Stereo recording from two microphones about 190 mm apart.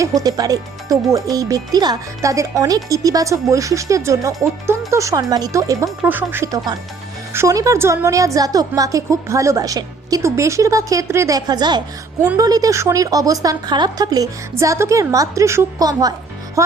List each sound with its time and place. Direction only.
0.0 s a woman's voice: 20° right (ahead or behind)